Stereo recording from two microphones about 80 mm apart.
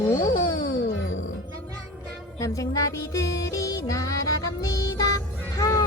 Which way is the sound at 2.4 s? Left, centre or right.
Left.